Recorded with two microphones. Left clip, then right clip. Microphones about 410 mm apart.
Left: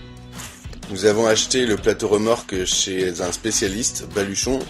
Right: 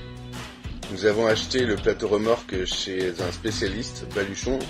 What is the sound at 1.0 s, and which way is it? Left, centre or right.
Speech, right.